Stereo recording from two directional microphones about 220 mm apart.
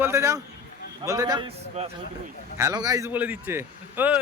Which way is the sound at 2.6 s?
15° right (ahead or behind).